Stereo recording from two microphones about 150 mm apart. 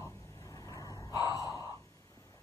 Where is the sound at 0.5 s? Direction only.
25° left (ahead or behind).